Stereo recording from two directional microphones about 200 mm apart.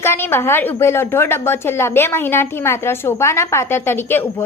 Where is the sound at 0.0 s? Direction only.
10° left (ahead or behind).